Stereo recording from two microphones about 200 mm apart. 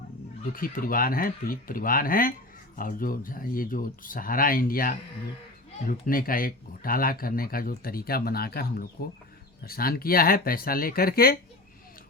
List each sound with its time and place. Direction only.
0.5 s speech: 45° left (ahead or behind)